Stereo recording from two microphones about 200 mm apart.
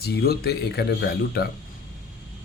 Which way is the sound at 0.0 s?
55° left (ahead or behind).